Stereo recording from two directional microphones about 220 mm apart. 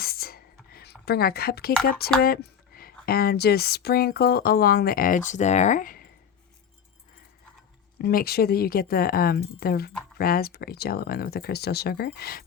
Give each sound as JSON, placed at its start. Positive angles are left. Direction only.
{"t": 0.0, "sound": "whispering", "side_deg": 45}
{"t": 2.2, "sound": "speech", "side_deg": 45}
{"t": 7.9, "sound": "speech", "side_deg": 45}